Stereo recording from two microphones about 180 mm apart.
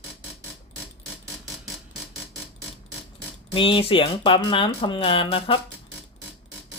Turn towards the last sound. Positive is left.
turn(degrees=30)  # may be behind; listen again after turning